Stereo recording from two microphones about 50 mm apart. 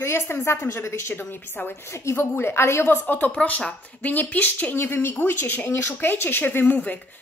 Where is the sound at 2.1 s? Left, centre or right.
Left.